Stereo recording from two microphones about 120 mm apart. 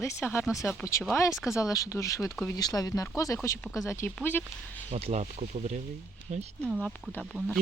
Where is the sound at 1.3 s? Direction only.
5° right (ahead or behind).